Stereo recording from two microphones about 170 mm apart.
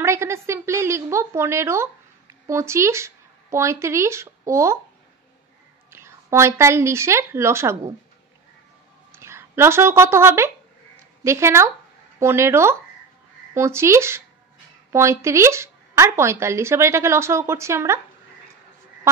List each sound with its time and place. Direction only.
0.0 s a woman's voice: 15° right (ahead or behind)
5.9 s a woman's voice: 15° right (ahead or behind)
9.1 s speech: 15° right (ahead or behind)